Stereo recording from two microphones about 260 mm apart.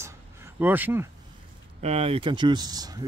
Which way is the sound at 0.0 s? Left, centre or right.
Centre.